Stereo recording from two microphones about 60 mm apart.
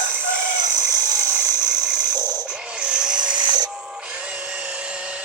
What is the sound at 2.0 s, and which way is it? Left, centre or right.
Music, left.